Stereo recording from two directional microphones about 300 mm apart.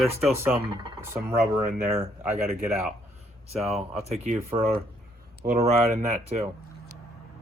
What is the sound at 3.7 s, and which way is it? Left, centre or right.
Speech, centre.